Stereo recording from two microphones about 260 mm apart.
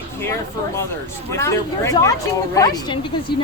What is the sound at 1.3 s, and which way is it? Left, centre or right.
Speech, centre.